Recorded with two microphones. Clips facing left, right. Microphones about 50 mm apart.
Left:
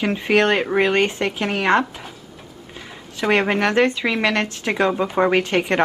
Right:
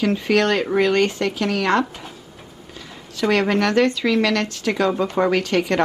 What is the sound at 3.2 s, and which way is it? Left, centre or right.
A woman's voice, left.